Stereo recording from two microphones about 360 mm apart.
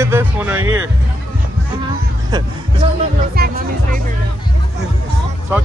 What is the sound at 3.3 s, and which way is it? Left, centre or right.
Music, right.